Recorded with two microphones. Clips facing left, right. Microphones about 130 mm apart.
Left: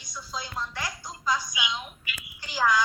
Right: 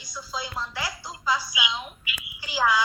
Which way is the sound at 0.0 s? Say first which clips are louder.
Right 3 dB; centre (ahead or behind).